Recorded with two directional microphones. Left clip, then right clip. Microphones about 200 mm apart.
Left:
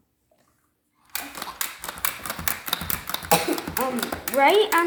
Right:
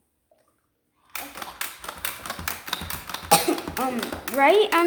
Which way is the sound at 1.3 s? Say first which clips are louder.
Left 2 dB; 40° left (ahead or behind).